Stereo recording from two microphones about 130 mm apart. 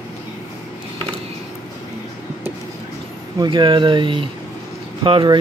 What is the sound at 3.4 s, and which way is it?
Speech, 35° right (ahead or behind).